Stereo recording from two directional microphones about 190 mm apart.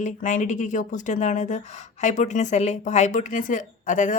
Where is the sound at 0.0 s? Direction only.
40° left (ahead or behind).